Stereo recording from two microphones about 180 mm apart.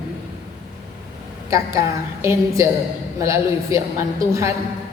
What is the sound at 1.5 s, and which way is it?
A woman's voice, 15° right (ahead or behind).